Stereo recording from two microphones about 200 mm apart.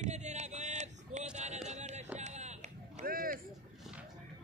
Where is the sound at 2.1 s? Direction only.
35° right (ahead or behind).